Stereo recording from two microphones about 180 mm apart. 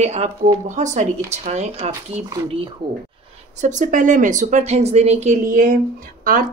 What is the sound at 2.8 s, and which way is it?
Speech, 25° right (ahead or behind).